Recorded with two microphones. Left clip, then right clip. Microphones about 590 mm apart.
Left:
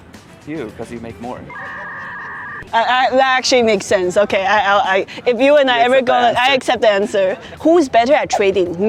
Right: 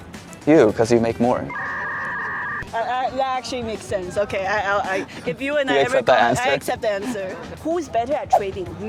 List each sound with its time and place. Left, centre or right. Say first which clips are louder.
0.4 s speech: right 13 dB; right
1.5 s a sound: right 2 dB; centre
2.7 s a woman's voice: left 10 dB; left
7.6 s a woman's voice: left 11 dB; left